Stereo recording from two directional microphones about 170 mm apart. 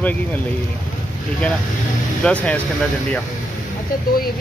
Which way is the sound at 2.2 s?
5° left (ahead or behind).